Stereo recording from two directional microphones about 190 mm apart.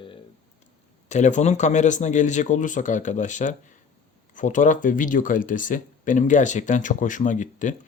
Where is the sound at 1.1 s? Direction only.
40° left (ahead or behind).